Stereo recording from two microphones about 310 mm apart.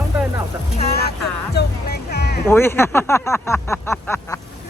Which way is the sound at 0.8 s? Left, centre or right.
Left.